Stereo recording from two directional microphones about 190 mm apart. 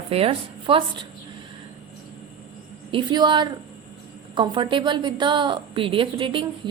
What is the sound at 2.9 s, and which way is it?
A woman's voice, 25° right (ahead or behind).